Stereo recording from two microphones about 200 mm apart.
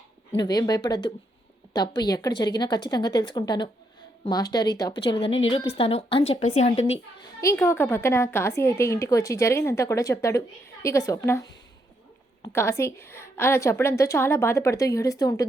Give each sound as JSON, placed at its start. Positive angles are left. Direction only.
{"t": 0.3, "sound": "a woman's voice", "side_deg": 20}
{"t": 7.6, "sound": "a woman's voice", "side_deg": 15}